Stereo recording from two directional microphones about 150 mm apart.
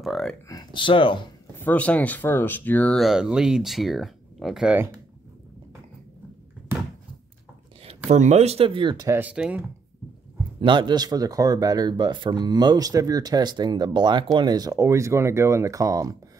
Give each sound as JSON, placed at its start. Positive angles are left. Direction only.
{"t": 0.0, "sound": "speech", "side_deg": 0}
{"t": 0.5, "sound": "speech", "side_deg": 30}
{"t": 1.6, "sound": "speech", "side_deg": 10}
{"t": 7.8, "sound": "speech", "side_deg": -45}
{"t": 9.2, "sound": "speech", "side_deg": -10}
{"t": 10.6, "sound": "speech", "side_deg": -30}